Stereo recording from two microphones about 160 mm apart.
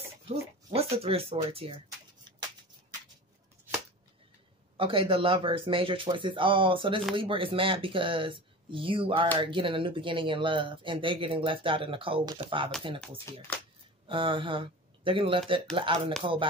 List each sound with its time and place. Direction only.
0.7 s speech: 40° right (ahead or behind)
4.7 s speech: 35° right (ahead or behind)
13.3 s speech: 20° left (ahead or behind)
14.0 s speech: 30° right (ahead or behind)